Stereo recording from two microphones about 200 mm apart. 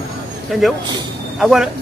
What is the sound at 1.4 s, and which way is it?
Speech, centre (ahead or behind).